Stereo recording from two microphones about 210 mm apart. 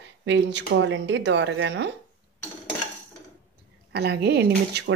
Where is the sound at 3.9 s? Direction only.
50° right (ahead or behind).